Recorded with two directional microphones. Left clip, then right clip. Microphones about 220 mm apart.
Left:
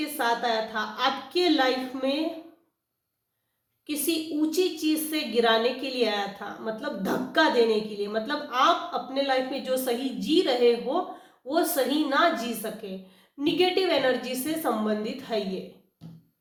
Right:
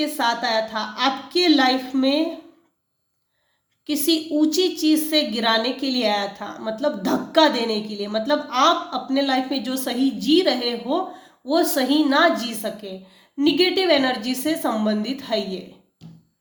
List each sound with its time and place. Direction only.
0.0 s a woman's voice: 45° right (ahead or behind)
3.8 s a woman's voice: 40° right (ahead or behind)
13.4 s a woman's voice: 40° right (ahead or behind)